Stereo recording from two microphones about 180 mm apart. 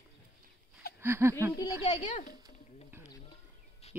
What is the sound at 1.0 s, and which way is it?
Speech, 15° right (ahead or behind).